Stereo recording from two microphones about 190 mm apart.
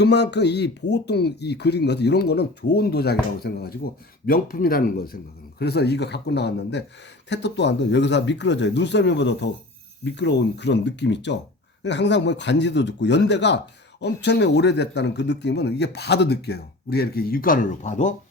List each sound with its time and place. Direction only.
0.0 s speech: 60° left (ahead or behind); by 18.1 s 40° left (ahead or behind)